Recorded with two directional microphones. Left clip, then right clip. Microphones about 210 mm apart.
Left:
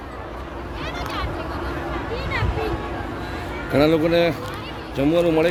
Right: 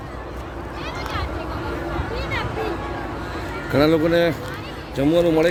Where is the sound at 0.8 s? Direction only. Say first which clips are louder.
Even; 30° left (ahead or behind).